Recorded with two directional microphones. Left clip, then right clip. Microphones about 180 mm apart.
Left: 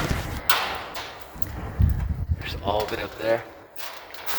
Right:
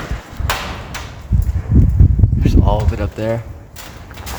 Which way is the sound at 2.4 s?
20° right (ahead or behind).